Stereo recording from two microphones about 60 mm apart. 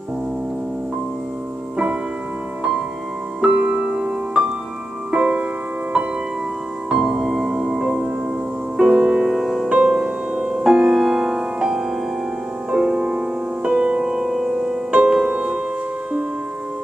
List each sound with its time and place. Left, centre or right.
3.4 s music: centre
6.9 s music: centre
9.3 s music: centre
9.7 s music: centre